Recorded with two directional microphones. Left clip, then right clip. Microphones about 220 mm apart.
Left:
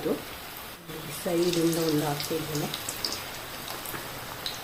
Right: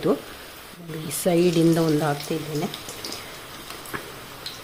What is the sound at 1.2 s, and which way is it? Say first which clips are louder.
Speech: right 6 dB; 55° right (ahead or behind).